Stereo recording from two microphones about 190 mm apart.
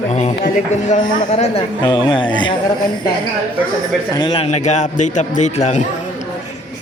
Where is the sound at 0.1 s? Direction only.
35° left (ahead or behind).